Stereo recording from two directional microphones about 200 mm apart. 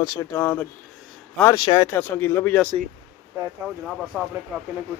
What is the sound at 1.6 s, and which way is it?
Speech, 15° left (ahead or behind).